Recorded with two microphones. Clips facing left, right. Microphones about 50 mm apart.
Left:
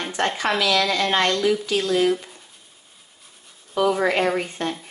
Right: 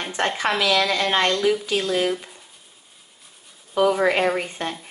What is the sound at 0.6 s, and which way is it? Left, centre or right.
Speech, centre.